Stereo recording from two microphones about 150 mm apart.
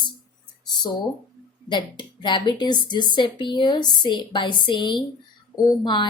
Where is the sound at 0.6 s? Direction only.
30° left (ahead or behind).